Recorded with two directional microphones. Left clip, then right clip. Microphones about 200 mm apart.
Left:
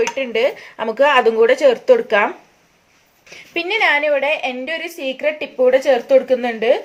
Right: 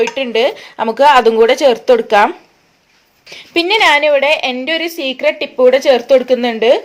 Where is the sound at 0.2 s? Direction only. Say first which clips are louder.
Right 4 dB; 30° right (ahead or behind).